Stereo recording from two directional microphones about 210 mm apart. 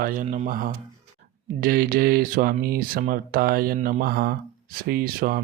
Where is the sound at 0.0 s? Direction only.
40° right (ahead or behind).